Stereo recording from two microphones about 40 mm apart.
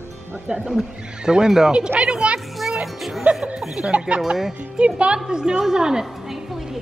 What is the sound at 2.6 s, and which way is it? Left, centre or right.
Music, centre.